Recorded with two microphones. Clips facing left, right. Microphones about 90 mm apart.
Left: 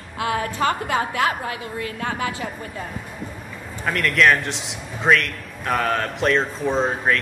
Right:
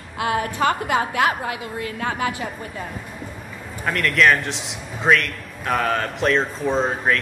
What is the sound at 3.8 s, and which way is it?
A man's voice, centre (ahead or behind).